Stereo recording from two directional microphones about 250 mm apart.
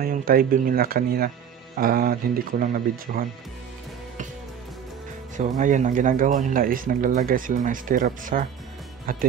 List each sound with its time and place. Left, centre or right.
0.0 s speech: right
5.6 s speech: right